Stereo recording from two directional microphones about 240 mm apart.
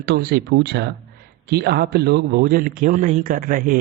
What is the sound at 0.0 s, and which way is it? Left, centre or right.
A man's voice, right.